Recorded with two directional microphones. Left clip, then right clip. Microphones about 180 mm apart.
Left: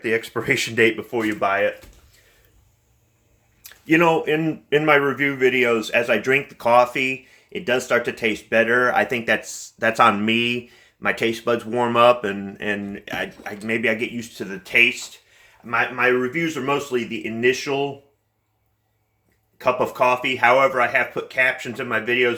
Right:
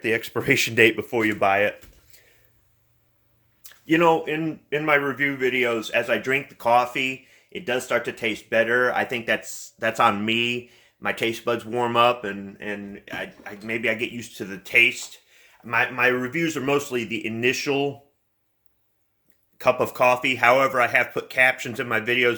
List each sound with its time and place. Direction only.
0.0 s speech: 35° right (ahead or behind)
3.6 s speech: 5° right (ahead or behind)
4.7 s speech: 10° left (ahead or behind)
12.2 s speech: 10° left (ahead or behind)
14.2 s speech: 20° right (ahead or behind)
15.6 s speech: 50° right (ahead or behind)
19.5 s speech: 45° right (ahead or behind)